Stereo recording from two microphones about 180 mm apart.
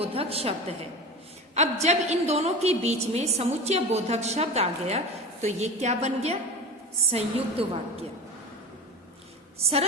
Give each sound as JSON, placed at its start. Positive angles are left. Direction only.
{"t": 0.0, "sound": "a woman's voice", "side_deg": -30}